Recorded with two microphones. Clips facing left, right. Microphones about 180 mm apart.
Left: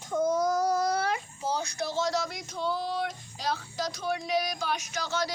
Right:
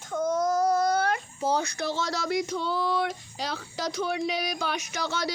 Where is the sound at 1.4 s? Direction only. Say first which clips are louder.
Right 4 dB; 65° right (ahead or behind).